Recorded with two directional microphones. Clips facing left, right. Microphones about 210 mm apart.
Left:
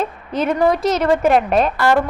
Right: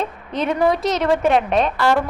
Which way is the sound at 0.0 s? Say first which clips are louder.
Left 2 dB; centre (ahead or behind).